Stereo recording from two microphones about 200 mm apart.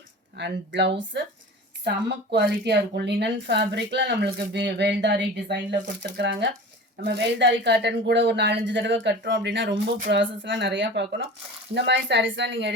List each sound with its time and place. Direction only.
0.3 s a woman's voice: 60° right (ahead or behind)